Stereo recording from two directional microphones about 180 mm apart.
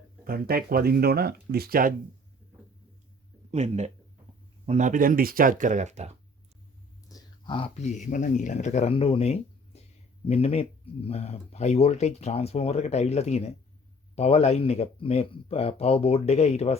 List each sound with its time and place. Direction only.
0.3 s speech: 55° right (ahead or behind)
3.5 s speech: 35° right (ahead or behind)
7.1 s speech: 25° left (ahead or behind)